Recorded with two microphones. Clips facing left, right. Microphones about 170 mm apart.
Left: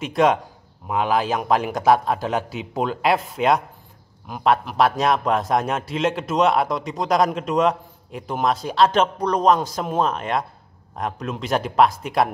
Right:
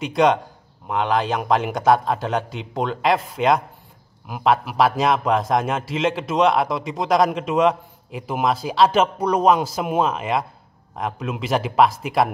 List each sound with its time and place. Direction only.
0.0 s a man's voice: centre (ahead or behind)